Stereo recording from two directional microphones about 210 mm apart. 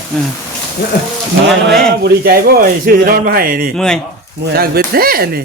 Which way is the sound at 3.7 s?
5° left (ahead or behind).